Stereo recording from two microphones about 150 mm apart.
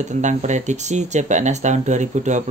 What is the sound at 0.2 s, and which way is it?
Speech, 55° right (ahead or behind).